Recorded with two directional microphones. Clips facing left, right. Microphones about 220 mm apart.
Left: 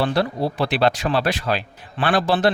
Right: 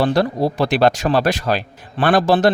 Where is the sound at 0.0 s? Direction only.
40° right (ahead or behind).